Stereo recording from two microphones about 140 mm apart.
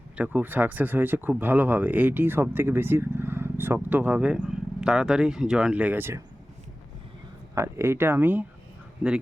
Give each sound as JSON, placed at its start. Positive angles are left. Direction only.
{"t": 0.2, "sound": "speech", "side_deg": -15}
{"t": 7.5, "sound": "speech", "side_deg": -20}